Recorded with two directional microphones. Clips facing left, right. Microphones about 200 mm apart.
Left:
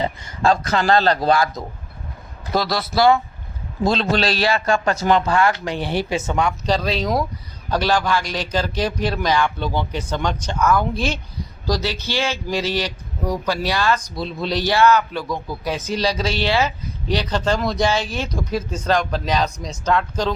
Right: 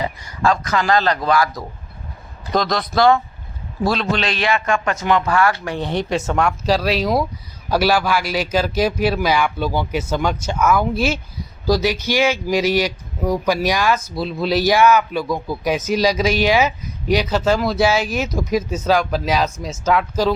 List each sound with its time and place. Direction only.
0.0 s a man's voice: 25° left (ahead or behind)
2.5 s speech: 5° left (ahead or behind)
4.1 s speech: 35° left (ahead or behind); by 5.9 s 20° left (ahead or behind)
5.9 s speech: 5° left (ahead or behind)